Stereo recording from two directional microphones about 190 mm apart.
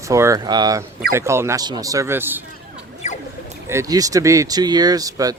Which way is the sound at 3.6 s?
15° right (ahead or behind).